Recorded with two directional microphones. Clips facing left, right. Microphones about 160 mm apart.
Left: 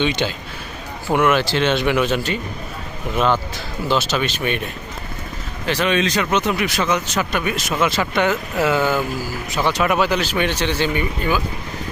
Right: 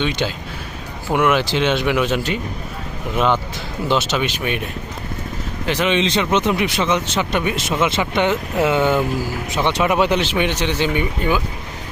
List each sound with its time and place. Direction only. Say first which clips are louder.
0.2 s speech: even; 5° right (ahead or behind)
3.8 s speech: right 1 dB; 20° right (ahead or behind)
5.6 s speech: right 1 dB; 20° right (ahead or behind)